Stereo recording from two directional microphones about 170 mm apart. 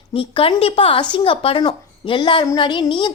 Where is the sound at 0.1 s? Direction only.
30° left (ahead or behind).